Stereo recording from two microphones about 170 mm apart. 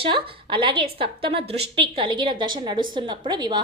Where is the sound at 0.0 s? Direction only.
30° right (ahead or behind).